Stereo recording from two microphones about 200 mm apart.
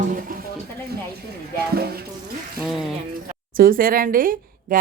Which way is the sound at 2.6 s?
Centre (ahead or behind).